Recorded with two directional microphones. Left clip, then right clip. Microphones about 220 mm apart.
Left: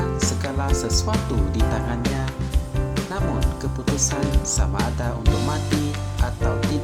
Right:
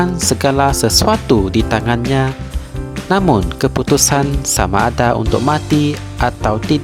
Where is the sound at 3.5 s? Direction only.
45° right (ahead or behind).